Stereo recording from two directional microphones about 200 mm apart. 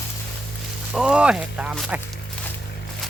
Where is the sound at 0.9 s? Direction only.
5° right (ahead or behind).